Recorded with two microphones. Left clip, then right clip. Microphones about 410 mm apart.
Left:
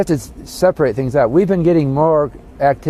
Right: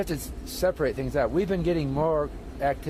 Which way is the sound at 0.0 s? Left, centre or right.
Left.